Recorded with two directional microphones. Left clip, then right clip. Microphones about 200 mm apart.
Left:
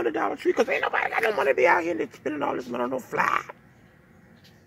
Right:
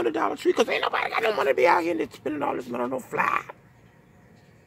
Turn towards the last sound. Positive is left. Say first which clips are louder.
# even
turn(degrees=0)  # may be behind; listen again after turning